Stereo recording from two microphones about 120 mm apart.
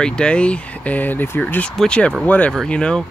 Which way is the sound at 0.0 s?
10° left (ahead or behind).